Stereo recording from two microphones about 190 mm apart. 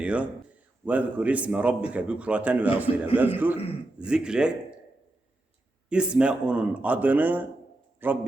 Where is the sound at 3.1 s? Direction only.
30° left (ahead or behind).